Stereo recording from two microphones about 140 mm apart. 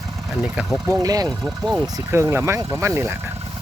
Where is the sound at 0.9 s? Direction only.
25° right (ahead or behind).